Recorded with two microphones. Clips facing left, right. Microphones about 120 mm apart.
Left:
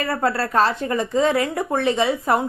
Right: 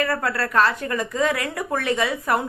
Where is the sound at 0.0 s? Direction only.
30° left (ahead or behind).